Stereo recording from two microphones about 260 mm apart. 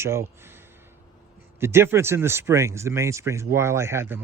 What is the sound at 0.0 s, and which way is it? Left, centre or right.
Speech, centre.